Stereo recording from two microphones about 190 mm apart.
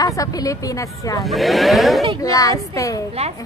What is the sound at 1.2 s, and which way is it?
Speech, centre (ahead or behind).